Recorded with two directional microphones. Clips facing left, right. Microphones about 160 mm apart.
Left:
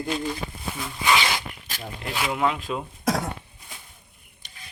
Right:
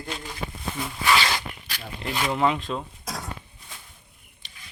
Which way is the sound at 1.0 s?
15° left (ahead or behind).